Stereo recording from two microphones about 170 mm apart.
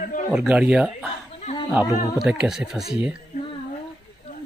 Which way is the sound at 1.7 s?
5° right (ahead or behind).